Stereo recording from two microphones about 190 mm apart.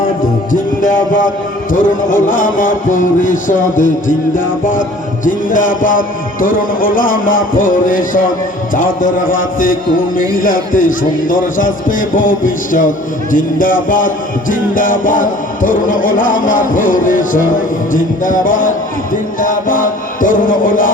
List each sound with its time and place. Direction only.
0.5 s music: 45° left (ahead or behind)
5.2 s music: 45° left (ahead or behind)
19.4 s chant: 45° left (ahead or behind)